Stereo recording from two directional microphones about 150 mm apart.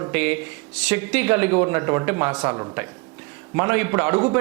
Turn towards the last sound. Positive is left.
turn(degrees=-15)  # may be behind; listen again after turning